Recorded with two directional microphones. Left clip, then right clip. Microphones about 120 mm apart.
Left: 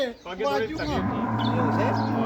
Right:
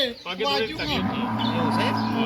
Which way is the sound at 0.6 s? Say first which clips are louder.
Right 2 dB; 15° left (ahead or behind).